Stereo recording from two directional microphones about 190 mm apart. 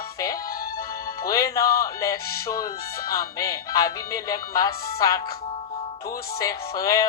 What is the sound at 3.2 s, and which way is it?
Speech, 20° left (ahead or behind).